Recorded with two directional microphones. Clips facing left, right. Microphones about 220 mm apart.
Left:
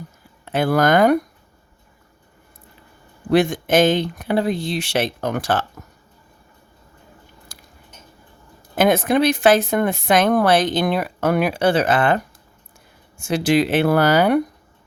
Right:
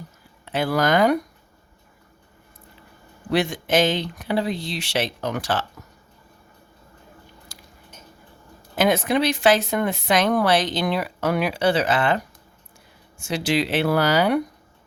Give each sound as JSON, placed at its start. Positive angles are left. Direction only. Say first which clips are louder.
{"t": 0.4, "sound": "a woman's voice", "louder": "left 4 dB", "side_deg": 50}
{"t": 3.2, "sound": "a woman's voice", "louder": "left 5 dB", "side_deg": 50}
{"t": 7.5, "sound": "a sound", "louder": "even", "side_deg": 50}
{"t": 8.7, "sound": "a woman's voice", "louder": "left 3 dB", "side_deg": 50}